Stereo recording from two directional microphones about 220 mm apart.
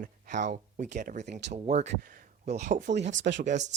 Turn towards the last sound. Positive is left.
turn(degrees=-35)  # may be behind; listen again after turning